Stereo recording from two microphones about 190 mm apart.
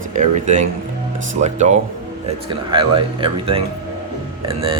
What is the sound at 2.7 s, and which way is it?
Speech, 25° right (ahead or behind).